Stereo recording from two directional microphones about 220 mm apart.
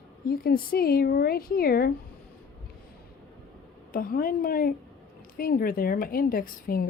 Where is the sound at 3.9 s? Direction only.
40° left (ahead or behind).